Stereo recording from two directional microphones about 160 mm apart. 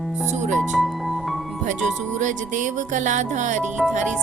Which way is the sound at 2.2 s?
50° right (ahead or behind).